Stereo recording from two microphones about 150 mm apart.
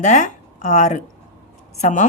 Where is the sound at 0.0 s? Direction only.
55° left (ahead or behind).